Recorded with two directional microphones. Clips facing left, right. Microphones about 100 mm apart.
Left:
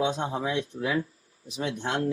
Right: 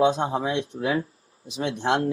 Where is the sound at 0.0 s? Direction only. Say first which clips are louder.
Right 6 dB; 40° right (ahead or behind).